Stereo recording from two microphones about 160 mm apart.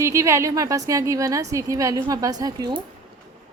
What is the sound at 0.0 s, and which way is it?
A woman's voice, 20° right (ahead or behind).